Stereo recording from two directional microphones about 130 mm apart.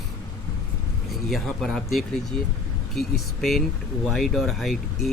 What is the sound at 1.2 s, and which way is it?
Speech, centre (ahead or behind).